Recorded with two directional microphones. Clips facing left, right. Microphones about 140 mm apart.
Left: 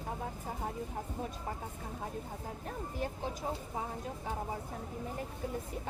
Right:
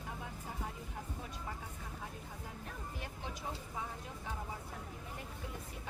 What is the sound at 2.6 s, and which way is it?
Speech, 40° left (ahead or behind).